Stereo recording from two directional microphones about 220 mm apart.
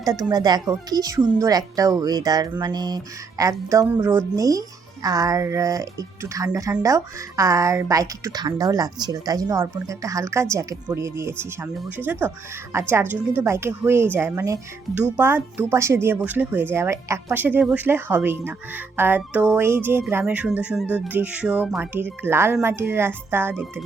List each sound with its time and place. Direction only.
0.0 s speech: 15° right (ahead or behind)